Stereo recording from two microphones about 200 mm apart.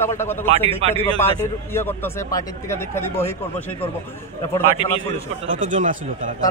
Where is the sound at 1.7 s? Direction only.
10° left (ahead or behind).